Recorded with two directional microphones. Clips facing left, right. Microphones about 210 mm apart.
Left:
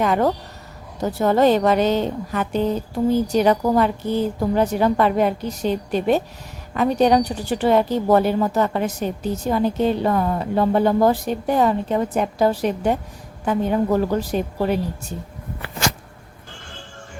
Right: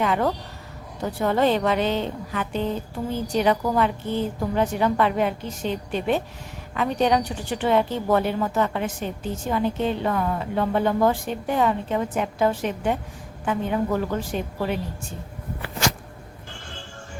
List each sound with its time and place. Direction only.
0.0 s a woman's voice: 40° left (ahead or behind)